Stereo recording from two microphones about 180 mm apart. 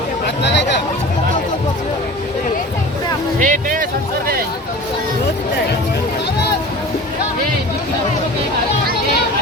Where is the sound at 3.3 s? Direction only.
45° right (ahead or behind).